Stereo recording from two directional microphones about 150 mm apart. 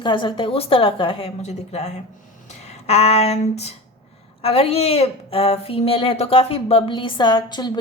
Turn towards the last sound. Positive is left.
turn(degrees=30)  # may be behind; listen again after turning